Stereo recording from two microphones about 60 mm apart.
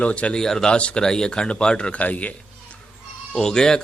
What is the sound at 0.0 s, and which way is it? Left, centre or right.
Speech, left.